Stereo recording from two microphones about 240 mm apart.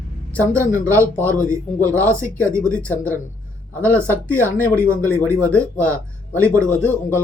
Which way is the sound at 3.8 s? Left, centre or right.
Centre.